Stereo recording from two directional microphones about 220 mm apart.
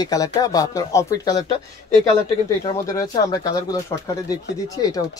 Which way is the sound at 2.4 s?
15° left (ahead or behind).